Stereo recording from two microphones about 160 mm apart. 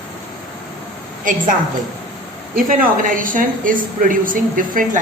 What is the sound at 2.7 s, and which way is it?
A man's voice, 60° right (ahead or behind).